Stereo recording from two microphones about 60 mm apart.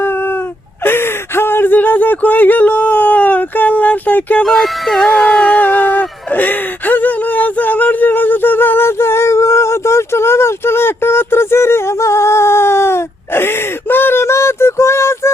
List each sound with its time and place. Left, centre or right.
0.9 s speech: left
4.4 s music: centre
5.5 s a sound: left